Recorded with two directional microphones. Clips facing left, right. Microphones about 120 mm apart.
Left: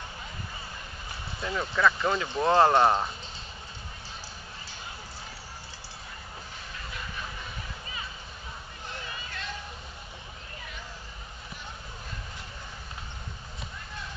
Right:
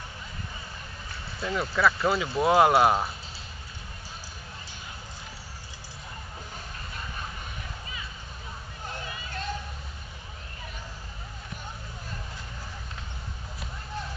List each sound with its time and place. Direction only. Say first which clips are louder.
1.4 s speech: right 1 dB; 5° right (ahead or behind)
8.9 s music: right 3 dB; 40° right (ahead or behind)